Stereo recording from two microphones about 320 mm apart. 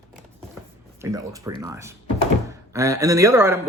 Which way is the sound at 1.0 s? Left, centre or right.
Centre.